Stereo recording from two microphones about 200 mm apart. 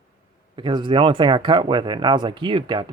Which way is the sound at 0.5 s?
25° right (ahead or behind).